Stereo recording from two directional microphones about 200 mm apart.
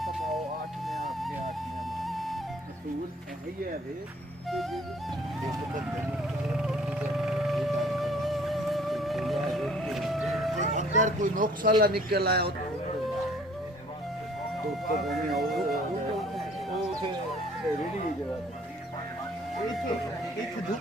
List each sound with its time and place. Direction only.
0.8 s music: centre (ahead or behind)
2.0 s flute: centre (ahead or behind)
6.5 s music: 5° right (ahead or behind)
10.6 s a man's voice: 35° right (ahead or behind); by 12.5 s 50° right (ahead or behind)
15.0 s a sound: centre (ahead or behind)